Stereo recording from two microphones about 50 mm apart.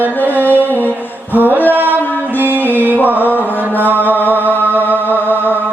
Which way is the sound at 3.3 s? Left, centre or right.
Right.